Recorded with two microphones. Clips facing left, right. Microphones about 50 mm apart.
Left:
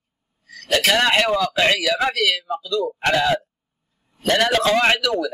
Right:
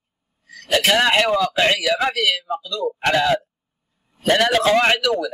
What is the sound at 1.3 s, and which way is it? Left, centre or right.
Speech, centre.